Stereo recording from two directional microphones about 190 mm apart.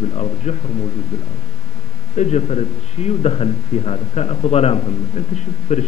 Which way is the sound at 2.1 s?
35° left (ahead or behind).